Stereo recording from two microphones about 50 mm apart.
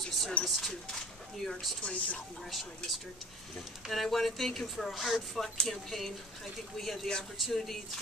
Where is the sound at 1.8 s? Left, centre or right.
Left.